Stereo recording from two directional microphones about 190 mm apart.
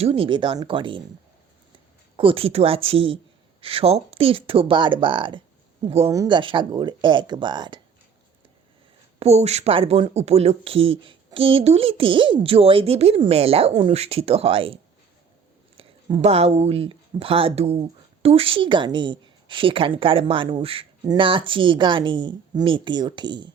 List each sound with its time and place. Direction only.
0.0 s a woman's voice: 30° right (ahead or behind)
2.1 s a woman's voice: 30° right (ahead or behind)
6.1 s a woman's voice: 20° right (ahead or behind)
9.1 s speech: 35° right (ahead or behind)
15.8 s a woman's voice: 30° right (ahead or behind)